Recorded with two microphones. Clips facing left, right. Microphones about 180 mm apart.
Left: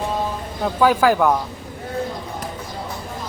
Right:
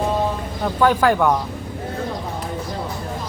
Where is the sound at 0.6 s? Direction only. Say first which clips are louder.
Left 1 dB; 5° left (ahead or behind).